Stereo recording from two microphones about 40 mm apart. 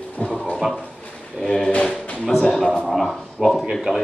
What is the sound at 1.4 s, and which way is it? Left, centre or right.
A man's voice, centre.